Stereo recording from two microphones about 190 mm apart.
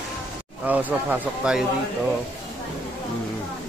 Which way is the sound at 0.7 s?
10° right (ahead or behind).